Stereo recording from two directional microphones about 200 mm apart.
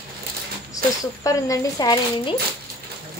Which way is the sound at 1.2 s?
20° left (ahead or behind).